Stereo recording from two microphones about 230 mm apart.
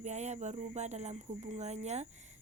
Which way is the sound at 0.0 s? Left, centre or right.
Right.